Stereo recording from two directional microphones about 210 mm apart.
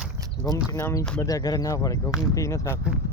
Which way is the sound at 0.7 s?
10° left (ahead or behind).